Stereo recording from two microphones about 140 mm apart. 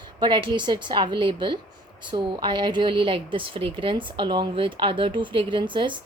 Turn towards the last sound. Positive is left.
turn(degrees=-35)  # may be behind; listen again after turning